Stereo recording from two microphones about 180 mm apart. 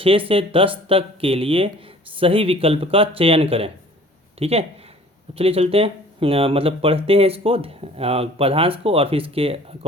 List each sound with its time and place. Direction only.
0.0 s speech: 30° right (ahead or behind)